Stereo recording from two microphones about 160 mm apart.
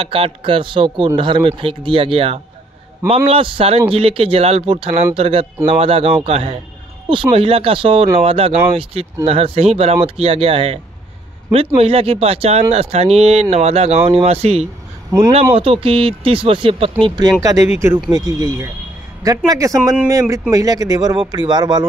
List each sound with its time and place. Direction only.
0.0 s speech: 35° right (ahead or behind)
15.0 s speech: 20° right (ahead or behind)
15.5 s speech: 35° right (ahead or behind)